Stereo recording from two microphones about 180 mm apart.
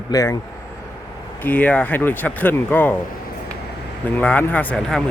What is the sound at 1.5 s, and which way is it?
Speech, 10° left (ahead or behind).